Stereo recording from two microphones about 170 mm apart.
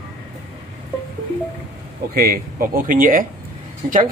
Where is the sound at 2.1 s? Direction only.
60° right (ahead or behind).